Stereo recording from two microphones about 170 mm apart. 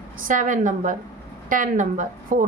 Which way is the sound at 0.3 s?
50° right (ahead or behind).